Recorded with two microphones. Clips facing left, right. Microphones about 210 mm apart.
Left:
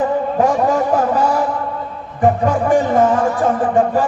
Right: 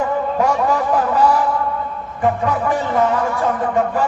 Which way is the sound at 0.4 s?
50° left (ahead or behind).